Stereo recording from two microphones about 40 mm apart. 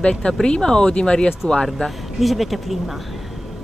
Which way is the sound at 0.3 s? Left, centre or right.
Centre.